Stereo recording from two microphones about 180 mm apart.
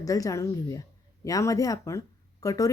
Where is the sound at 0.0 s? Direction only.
20° left (ahead or behind).